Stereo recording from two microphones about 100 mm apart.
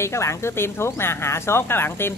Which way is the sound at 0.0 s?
30° left (ahead or behind).